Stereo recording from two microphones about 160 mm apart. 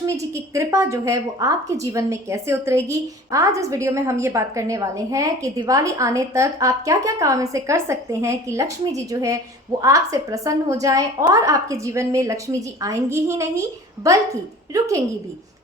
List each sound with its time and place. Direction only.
0.0 s a woman's voice: 20° right (ahead or behind)